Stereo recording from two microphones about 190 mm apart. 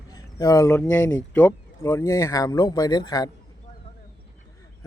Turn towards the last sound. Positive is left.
turn(degrees=20)  # may be behind; listen again after turning